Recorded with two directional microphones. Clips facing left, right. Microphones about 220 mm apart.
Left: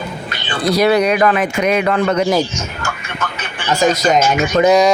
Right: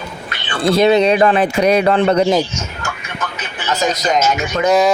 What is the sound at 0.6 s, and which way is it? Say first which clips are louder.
Speech: right 2 dB; 25° right (ahead or behind).